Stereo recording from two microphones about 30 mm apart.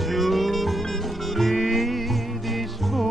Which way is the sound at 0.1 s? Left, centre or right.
Centre.